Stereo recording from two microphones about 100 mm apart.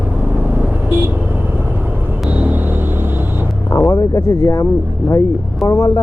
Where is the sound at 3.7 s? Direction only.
30° left (ahead or behind).